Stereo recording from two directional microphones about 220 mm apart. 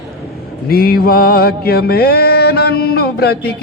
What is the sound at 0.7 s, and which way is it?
Music, 45° left (ahead or behind).